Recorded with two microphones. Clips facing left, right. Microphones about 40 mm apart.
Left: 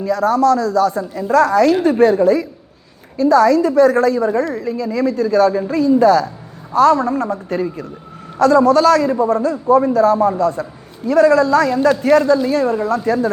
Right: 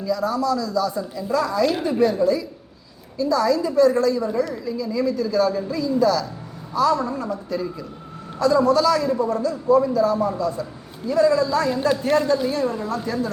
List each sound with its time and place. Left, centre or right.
0.0 s a woman's voice: left
9.0 s a woman's voice: left